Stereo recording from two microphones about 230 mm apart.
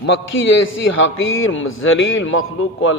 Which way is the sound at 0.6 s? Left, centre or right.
Left.